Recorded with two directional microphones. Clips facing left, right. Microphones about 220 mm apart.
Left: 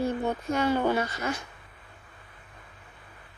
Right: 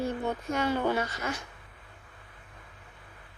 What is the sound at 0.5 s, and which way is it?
Speech, 35° left (ahead or behind).